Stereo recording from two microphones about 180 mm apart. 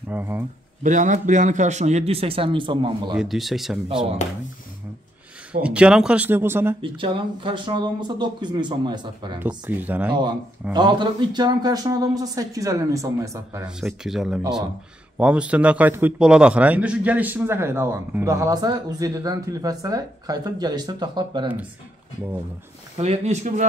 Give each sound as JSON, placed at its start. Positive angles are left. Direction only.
{"t": 0.1, "sound": "a man's voice", "side_deg": -10}
{"t": 0.8, "sound": "speech", "side_deg": -45}
{"t": 3.2, "sound": "speech", "side_deg": 0}
{"t": 5.5, "sound": "a man's voice", "side_deg": -5}
{"t": 6.8, "sound": "a man's voice", "side_deg": -25}
{"t": 9.4, "sound": "a man's voice", "side_deg": -10}
{"t": 10.7, "sound": "a man's voice", "side_deg": -25}
{"t": 13.7, "sound": "a man's voice", "side_deg": -5}
{"t": 22.9, "sound": "speech", "side_deg": -35}